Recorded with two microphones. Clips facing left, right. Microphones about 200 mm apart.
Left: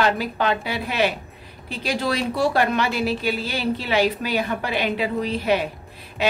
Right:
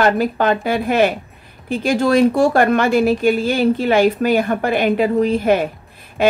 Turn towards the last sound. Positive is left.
turn(degrees=-50)  # may be behind; listen again after turning